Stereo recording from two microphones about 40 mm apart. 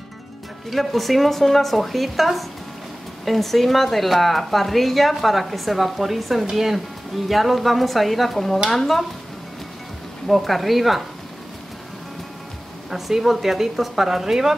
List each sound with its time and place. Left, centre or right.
0.7 s speech: centre
10.2 s speech: centre
12.9 s speech: centre